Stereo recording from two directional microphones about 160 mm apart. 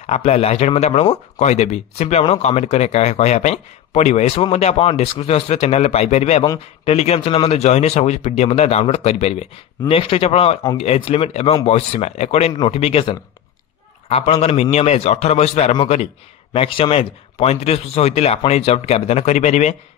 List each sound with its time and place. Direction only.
0.0 s speech: 40° left (ahead or behind)
6.4 s a man's voice: 25° left (ahead or behind)
6.9 s speech: 40° left (ahead or behind)